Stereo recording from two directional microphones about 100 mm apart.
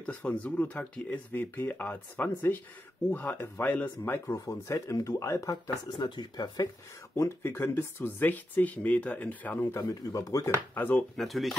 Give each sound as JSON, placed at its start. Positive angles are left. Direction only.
{"t": 0.0, "sound": "speech", "side_deg": 15}
{"t": 7.2, "sound": "speech", "side_deg": 25}
{"t": 9.8, "sound": "speech", "side_deg": 35}
{"t": 10.7, "sound": "speech", "side_deg": 20}
{"t": 11.1, "sound": "speech", "side_deg": 0}